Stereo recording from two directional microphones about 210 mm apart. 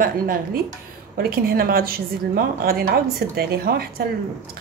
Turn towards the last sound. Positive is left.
turn(degrees=-45)  # may be behind; listen again after turning